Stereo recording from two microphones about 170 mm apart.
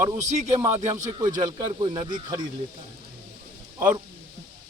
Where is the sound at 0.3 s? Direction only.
45° right (ahead or behind).